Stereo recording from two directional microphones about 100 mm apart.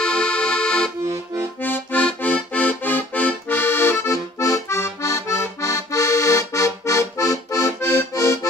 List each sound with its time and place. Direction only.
0.0 s accordion: 10° left (ahead or behind)
1.0 s accordion: 25° right (ahead or behind)
1.6 s accordion: 20° left (ahead or behind); by 7.7 s 35° left (ahead or behind)